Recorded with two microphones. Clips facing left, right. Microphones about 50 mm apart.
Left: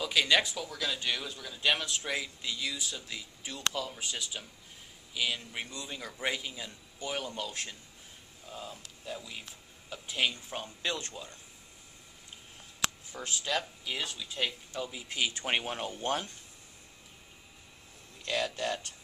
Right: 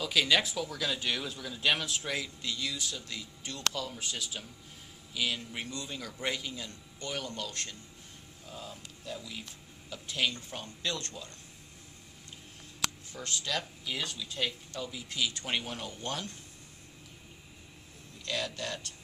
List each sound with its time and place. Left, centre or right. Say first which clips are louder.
0.0 s a man's voice: left 1 dB; centre
13.1 s speech: left 2 dB; centre
18.2 s speech: left 3 dB; centre